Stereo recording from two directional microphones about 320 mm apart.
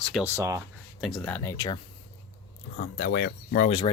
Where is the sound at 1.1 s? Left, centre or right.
Centre.